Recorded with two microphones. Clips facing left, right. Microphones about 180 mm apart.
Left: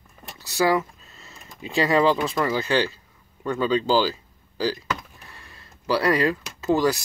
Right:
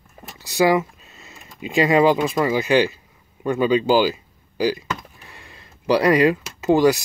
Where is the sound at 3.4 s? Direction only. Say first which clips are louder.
Right 4 dB; 15° right (ahead or behind).